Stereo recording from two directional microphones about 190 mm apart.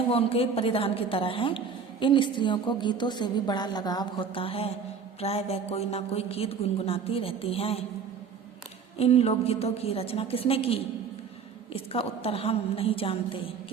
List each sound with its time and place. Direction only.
0.1 s a woman's voice: 30° left (ahead or behind)
9.0 s a woman's voice: 35° left (ahead or behind)